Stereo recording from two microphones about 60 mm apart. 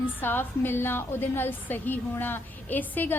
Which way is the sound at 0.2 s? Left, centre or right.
Left.